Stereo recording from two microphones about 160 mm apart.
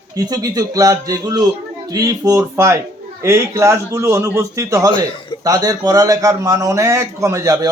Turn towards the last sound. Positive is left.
turn(degrees=-20)  # may be behind; listen again after turning